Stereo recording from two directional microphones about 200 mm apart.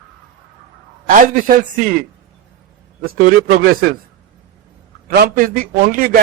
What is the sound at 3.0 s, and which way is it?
Speech, 45° right (ahead or behind).